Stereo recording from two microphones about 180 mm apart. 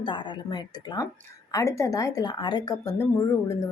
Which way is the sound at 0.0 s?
25° left (ahead or behind).